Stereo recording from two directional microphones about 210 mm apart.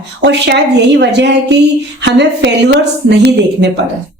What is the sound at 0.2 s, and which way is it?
A woman's voice, 55° right (ahead or behind).